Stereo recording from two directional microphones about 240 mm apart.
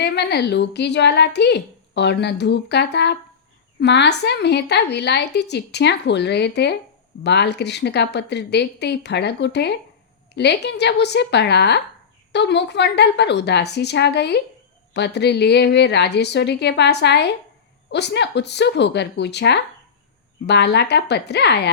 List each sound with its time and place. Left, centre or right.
0.0 s speech: left